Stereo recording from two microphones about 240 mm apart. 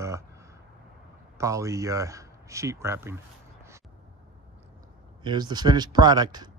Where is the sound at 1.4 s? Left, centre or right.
Centre.